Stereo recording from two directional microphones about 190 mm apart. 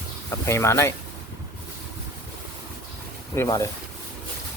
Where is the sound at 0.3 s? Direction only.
15° left (ahead or behind).